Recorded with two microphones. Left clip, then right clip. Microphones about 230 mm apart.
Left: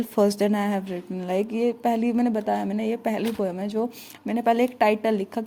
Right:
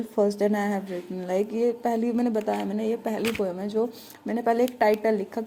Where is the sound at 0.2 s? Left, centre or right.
Left.